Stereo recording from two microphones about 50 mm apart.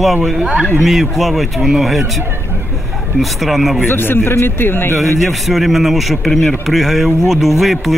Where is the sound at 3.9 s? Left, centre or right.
Left.